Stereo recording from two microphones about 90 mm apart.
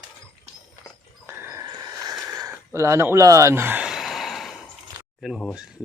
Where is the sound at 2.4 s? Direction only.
35° right (ahead or behind).